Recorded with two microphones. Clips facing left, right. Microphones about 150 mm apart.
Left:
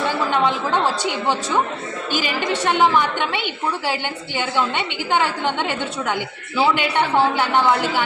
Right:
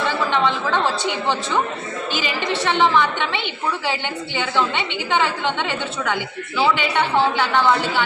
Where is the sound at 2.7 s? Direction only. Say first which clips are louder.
Even; 10° left (ahead or behind).